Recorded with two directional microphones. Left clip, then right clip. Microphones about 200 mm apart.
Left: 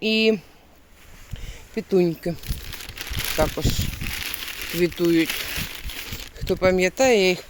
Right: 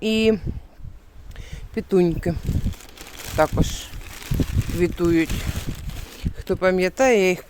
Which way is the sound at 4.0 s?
35° right (ahead or behind).